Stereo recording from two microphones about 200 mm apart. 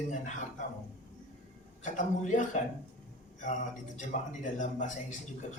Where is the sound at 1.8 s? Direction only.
40° left (ahead or behind).